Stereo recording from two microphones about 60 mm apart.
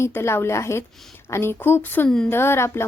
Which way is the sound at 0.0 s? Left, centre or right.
Left.